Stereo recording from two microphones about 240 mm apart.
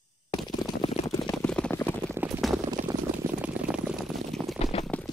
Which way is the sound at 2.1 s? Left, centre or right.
Centre.